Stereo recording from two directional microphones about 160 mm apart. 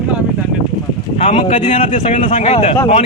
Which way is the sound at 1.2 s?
40° left (ahead or behind).